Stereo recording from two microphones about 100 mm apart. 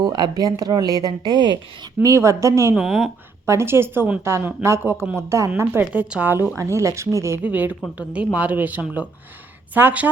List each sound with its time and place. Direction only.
0.0 s speech: 45° right (ahead or behind)
2.0 s a woman's voice: 30° right (ahead or behind)
2.7 s speech: 5° right (ahead or behind)
3.4 s a woman's voice: 25° right (ahead or behind)
5.8 s speech: 15° right (ahead or behind)
6.6 s speech: 30° right (ahead or behind)
7.4 s speech: 15° right (ahead or behind)